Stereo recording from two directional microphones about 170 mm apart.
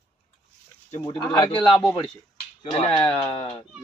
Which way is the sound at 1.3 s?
25° left (ahead or behind).